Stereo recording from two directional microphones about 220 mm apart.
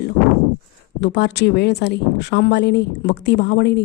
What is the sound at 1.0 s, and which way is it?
A woman's voice, 50° left (ahead or behind).